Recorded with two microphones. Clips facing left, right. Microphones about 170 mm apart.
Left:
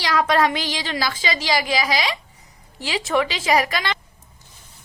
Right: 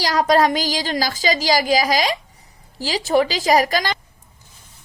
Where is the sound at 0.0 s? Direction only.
40° right (ahead or behind).